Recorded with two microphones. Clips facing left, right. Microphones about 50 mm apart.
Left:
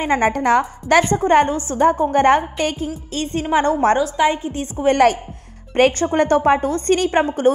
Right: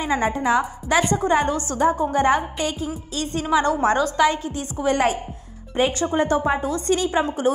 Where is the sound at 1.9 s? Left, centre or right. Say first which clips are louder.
Left 5 dB; left.